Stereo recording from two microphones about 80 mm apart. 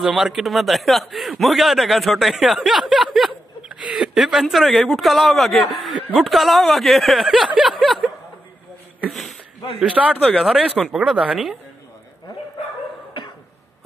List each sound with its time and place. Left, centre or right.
0.0 s a man's voice: centre
7.5 s a sound: centre
9.1 s speech: centre
9.8 s a man's voice: centre
10.3 s a man's voice: centre
10.8 s a man's voice: centre